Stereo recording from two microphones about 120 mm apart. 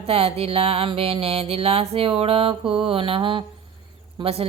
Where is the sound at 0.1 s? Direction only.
55° right (ahead or behind).